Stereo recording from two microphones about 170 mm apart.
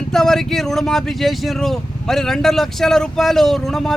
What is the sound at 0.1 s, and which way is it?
Speech, 5° left (ahead or behind).